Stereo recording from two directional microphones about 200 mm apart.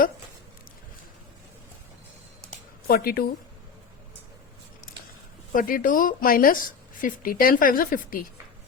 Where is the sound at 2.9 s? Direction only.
50° left (ahead or behind).